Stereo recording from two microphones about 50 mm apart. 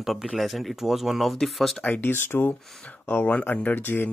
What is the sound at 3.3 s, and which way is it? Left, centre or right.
Speech, left.